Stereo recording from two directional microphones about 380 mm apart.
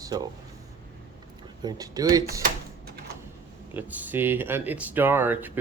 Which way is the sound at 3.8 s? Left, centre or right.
Centre.